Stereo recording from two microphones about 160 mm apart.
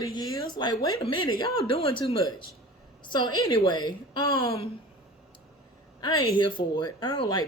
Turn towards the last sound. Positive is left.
turn(degrees=25)  # may be behind; listen again after turning